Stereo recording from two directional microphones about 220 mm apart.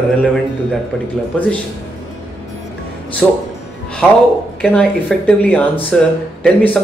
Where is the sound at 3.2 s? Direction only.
Centre (ahead or behind).